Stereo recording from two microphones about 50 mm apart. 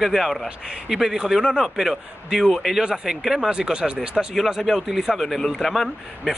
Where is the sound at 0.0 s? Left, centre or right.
Centre.